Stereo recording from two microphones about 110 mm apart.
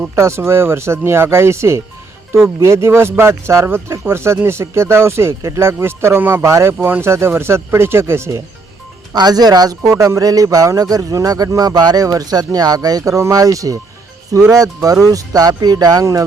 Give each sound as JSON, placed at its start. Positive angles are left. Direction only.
{"t": 0.2, "sound": "speech", "side_deg": -25}
{"t": 9.1, "sound": "speech", "side_deg": -40}